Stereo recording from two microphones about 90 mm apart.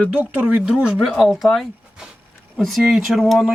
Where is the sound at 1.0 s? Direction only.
Centre (ahead or behind).